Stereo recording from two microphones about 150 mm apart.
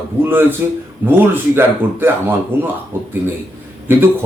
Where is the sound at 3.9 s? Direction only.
15° right (ahead or behind).